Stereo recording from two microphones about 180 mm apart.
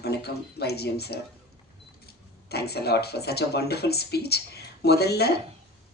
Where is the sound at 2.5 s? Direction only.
65° left (ahead or behind).